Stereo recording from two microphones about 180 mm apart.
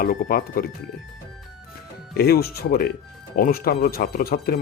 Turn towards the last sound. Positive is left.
turn(degrees=55)  # may be behind; listen again after turning